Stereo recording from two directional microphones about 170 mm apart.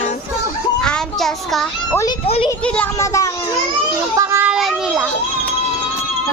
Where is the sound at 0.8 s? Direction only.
5° left (ahead or behind).